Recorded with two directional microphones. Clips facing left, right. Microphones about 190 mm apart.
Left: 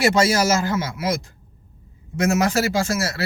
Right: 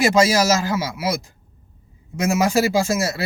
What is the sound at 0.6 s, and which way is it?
Speech, 10° right (ahead or behind).